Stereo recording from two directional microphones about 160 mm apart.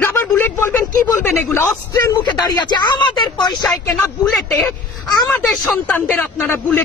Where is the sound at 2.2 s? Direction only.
25° left (ahead or behind).